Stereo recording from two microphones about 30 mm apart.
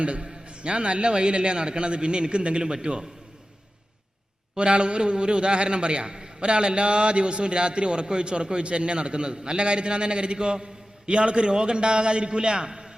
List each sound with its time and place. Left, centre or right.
0.0 s a man's voice: right
4.5 s a man's voice: right